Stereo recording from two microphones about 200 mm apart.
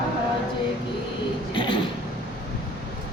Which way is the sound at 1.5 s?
25° left (ahead or behind).